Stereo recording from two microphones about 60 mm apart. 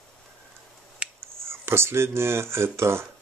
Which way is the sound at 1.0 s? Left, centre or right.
Centre.